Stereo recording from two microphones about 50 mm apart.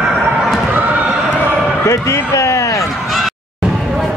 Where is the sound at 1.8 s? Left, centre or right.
Left.